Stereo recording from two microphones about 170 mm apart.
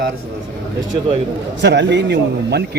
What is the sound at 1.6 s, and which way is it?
A man's voice, 90° right.